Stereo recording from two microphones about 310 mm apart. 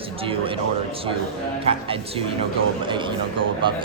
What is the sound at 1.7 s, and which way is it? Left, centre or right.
Speech, centre.